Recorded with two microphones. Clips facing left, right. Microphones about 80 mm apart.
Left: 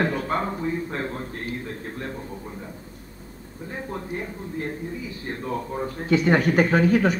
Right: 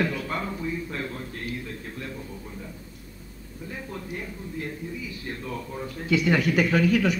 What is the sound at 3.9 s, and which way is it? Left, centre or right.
Speech, left.